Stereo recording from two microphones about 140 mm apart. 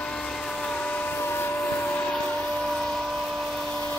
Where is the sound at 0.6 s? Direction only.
10° left (ahead or behind).